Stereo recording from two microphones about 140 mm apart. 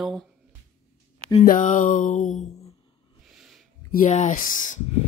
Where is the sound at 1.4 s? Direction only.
70° left (ahead or behind).